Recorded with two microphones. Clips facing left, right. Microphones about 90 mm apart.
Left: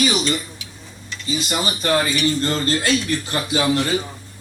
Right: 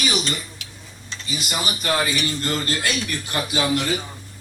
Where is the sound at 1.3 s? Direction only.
30° left (ahead or behind).